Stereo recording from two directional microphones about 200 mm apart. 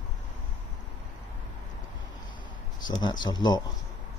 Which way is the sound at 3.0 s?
20° left (ahead or behind).